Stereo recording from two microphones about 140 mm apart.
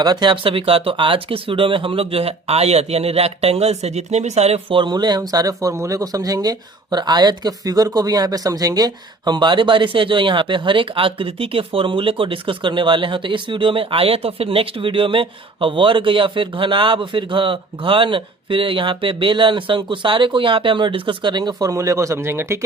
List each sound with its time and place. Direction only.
0.0 s speech: 30° right (ahead or behind)